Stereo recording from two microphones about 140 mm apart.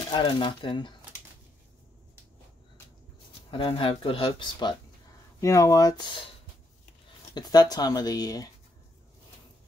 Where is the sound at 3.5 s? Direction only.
40° left (ahead or behind).